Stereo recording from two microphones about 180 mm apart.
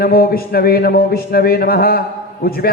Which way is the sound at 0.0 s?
55° left (ahead or behind).